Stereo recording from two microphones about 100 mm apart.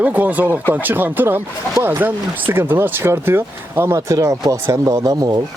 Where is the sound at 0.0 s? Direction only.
15° right (ahead or behind).